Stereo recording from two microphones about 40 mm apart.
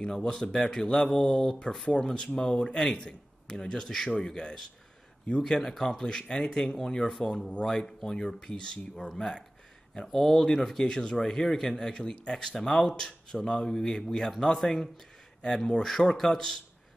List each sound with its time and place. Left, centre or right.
0.0 s speech: centre
5.6 s speech: centre